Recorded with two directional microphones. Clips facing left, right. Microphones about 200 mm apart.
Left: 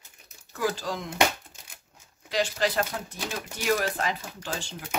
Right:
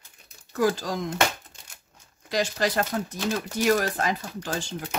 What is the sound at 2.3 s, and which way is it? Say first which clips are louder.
Speech: right 1 dB; 40° right (ahead or behind).